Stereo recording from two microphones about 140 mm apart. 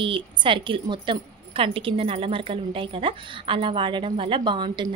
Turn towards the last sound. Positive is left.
turn(degrees=-35)  # may be behind; listen again after turning